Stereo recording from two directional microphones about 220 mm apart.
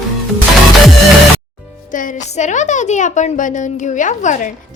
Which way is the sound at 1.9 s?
35° left (ahead or behind).